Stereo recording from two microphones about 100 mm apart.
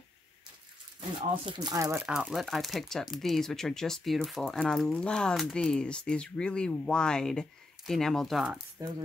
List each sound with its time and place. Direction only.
1.5 s speech: 40° right (ahead or behind)
2.0 s speech: 5° right (ahead or behind)